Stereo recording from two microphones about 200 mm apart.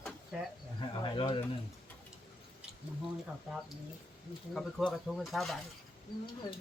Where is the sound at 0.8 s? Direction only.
25° left (ahead or behind).